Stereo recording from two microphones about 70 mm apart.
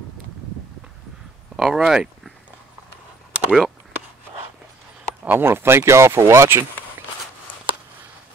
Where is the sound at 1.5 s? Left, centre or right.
Centre.